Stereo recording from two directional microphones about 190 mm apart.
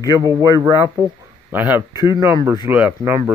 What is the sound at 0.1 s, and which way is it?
Speech, 15° right (ahead or behind).